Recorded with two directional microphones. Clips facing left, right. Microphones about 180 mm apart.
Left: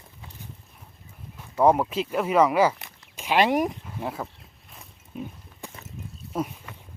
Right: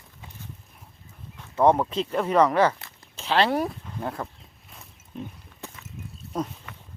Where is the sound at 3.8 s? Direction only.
5° left (ahead or behind).